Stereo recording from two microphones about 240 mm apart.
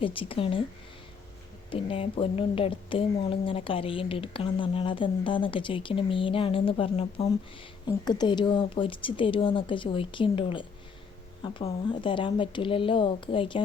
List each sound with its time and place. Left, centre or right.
0.0 s a woman's voice: left
1.7 s a woman's voice: left